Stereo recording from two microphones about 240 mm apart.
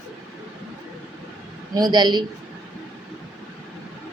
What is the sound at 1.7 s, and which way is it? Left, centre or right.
Speech, centre.